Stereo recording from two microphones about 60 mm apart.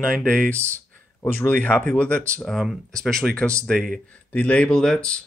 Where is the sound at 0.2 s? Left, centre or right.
Centre.